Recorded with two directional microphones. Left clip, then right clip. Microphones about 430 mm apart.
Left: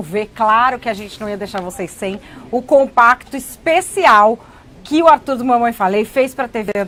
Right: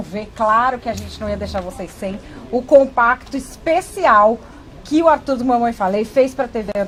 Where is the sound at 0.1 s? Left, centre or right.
Left.